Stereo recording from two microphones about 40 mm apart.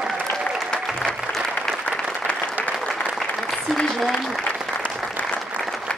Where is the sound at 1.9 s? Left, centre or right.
Centre.